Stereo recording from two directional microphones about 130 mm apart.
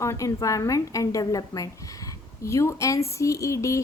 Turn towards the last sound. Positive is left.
turn(degrees=25)  # may be behind; listen again after turning